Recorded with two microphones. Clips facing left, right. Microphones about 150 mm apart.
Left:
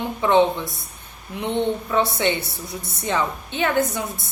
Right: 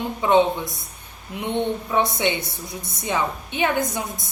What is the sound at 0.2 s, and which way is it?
A woman's voice, 15° right (ahead or behind).